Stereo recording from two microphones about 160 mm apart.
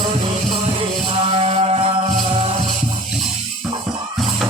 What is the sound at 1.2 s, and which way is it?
Music, 40° right (ahead or behind).